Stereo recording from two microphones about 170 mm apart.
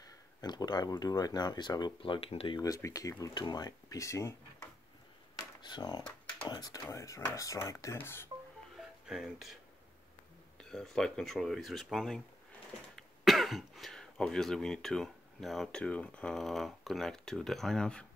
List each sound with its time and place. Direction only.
0.0 s speech: 20° left (ahead or behind)
5.6 s speech: 25° left (ahead or behind)
8.7 s music: centre (ahead or behind)
10.6 s speech: 5° left (ahead or behind)
13.2 s speech: centre (ahead or behind)